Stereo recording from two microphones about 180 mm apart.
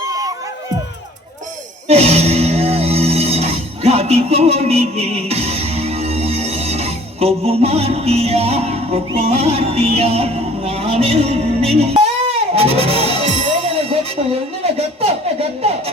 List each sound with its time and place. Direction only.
0.1 s crowd: 20° right (ahead or behind)
1.9 s music: 35° right (ahead or behind)
15.0 s speech: 35° right (ahead or behind)